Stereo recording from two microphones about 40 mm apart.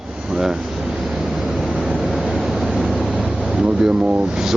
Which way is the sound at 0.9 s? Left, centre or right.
Centre.